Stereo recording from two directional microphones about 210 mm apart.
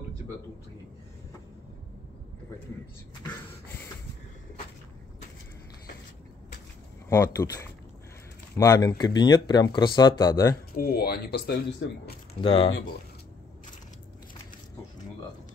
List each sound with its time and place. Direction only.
7.1 s speech: 10° left (ahead or behind)
10.7 s speech: 45° left (ahead or behind)
12.4 s speech: 25° left (ahead or behind)